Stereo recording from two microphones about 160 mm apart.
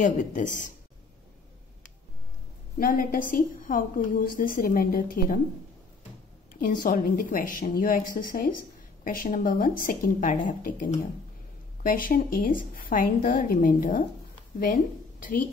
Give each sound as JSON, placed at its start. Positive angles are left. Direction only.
{"t": 0.0, "sound": "speech", "side_deg": 55}
{"t": 2.8, "sound": "a woman's voice", "side_deg": 60}
{"t": 6.6, "sound": "a woman's voice", "side_deg": 55}